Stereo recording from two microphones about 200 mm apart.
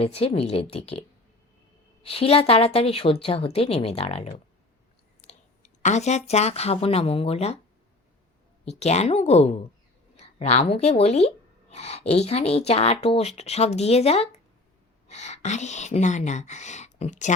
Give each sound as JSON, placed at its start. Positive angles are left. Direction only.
{"t": 0.0, "sound": "speech", "side_deg": 30}
{"t": 2.0, "sound": "speech", "side_deg": 30}
{"t": 5.3, "sound": "speech", "side_deg": 35}
{"t": 8.8, "sound": "speech", "side_deg": 35}